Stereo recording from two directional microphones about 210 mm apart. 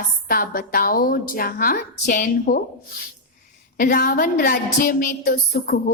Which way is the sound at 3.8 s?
40° left (ahead or behind).